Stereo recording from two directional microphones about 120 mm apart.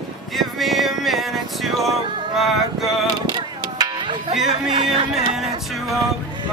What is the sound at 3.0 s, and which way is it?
Music, 35° right (ahead or behind).